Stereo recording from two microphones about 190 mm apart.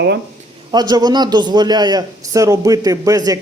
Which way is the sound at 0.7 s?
20° right (ahead or behind).